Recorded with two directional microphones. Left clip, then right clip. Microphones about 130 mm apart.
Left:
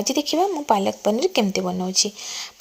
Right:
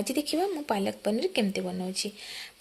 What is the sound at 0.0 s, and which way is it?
A woman's voice, 15° left (ahead or behind).